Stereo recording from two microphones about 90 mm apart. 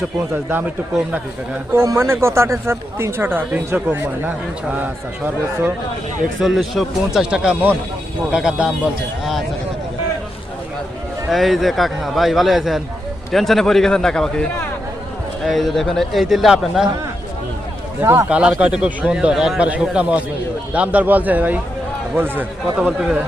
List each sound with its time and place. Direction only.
1.7 s speech: 30° right (ahead or behind)
6.4 s a man's voice: centre (ahead or behind)
11.3 s a man's voice: centre (ahead or behind)
15.4 s a man's voice: centre (ahead or behind)
18.0 s speech: 25° right (ahead or behind)
18.3 s a man's voice: 15° right (ahead or behind)
22.9 s a man's voice: 5° right (ahead or behind)